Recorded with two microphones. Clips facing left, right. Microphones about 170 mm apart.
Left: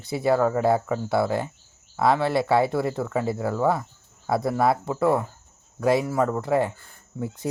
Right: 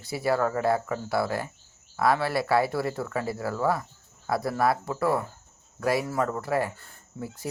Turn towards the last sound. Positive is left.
turn(degrees=20)  # may be behind; listen again after turning